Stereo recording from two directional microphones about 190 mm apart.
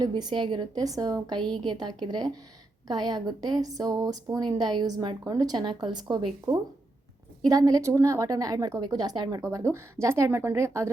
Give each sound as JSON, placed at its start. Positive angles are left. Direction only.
{"t": 0.0, "sound": "a woman's voice", "side_deg": -20}